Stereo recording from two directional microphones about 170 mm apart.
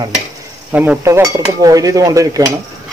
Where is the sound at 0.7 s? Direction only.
10° right (ahead or behind).